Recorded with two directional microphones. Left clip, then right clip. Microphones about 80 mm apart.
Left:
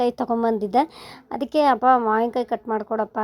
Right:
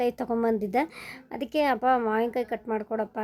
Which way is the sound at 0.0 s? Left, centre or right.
Left.